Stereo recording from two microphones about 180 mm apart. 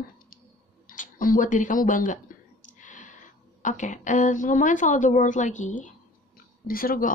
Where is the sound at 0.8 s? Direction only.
50° left (ahead or behind).